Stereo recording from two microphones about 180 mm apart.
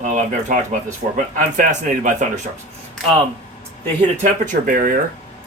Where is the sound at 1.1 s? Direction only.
45° right (ahead or behind).